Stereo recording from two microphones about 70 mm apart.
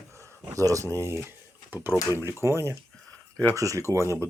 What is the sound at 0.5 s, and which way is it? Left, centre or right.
Speech, right.